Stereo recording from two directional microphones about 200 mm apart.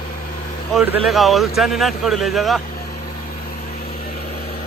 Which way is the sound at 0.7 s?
5° right (ahead or behind).